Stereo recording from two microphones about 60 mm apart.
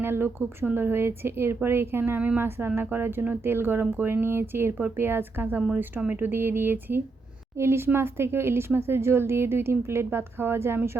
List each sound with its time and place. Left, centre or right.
0.0 s speech: right
5.7 s a woman's voice: right
6.1 s a woman's voice: right